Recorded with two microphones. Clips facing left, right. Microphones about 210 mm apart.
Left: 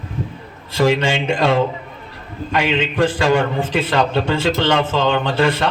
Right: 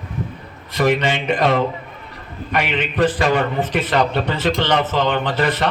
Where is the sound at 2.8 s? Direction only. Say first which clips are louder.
Left 1 dB; 25° left (ahead or behind).